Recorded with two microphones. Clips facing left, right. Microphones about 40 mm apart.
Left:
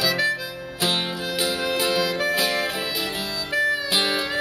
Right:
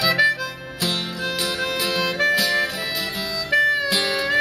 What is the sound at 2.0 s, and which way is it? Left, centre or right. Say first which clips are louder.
Music: right 3 dB; centre.